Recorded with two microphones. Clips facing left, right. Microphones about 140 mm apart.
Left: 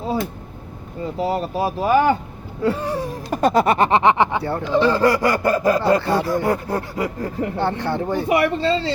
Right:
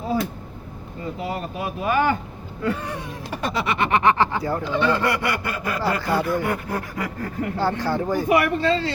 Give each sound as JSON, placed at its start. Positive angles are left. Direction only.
{"t": 1.2, "sound": "speech", "side_deg": 35}
{"t": 2.6, "sound": "a sound", "side_deg": 35}
{"t": 4.4, "sound": "speech", "side_deg": 30}